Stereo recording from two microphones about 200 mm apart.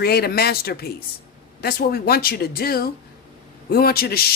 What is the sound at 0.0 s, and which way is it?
A man's voice, 50° left (ahead or behind).